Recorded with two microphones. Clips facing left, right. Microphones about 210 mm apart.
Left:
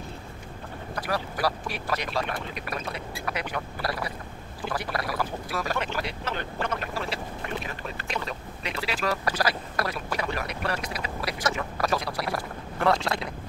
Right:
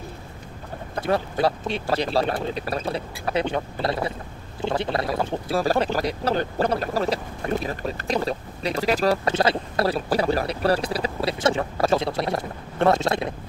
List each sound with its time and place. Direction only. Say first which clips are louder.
0.9 s speech: right 7 dB; 25° right (ahead or behind)